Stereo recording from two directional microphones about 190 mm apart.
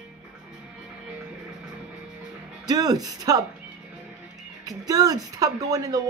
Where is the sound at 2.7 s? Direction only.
20° right (ahead or behind).